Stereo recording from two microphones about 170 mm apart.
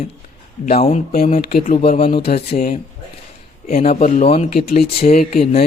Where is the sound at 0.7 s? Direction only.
35° left (ahead or behind).